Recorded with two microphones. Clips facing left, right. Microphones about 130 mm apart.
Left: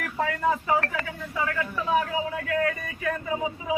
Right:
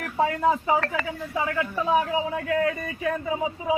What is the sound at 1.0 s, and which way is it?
A man's voice, 25° right (ahead or behind).